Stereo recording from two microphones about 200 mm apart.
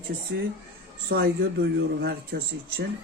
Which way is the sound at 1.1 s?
50° right (ahead or behind).